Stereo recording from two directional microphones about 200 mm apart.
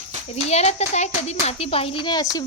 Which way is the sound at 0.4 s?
35° left (ahead or behind).